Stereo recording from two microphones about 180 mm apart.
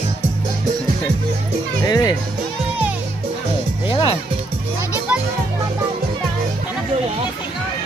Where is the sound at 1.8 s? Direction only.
20° left (ahead or behind).